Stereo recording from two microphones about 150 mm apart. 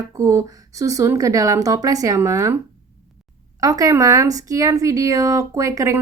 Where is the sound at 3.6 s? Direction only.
25° right (ahead or behind).